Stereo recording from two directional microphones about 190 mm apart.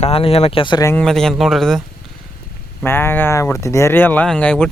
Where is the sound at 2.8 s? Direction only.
10° left (ahead or behind).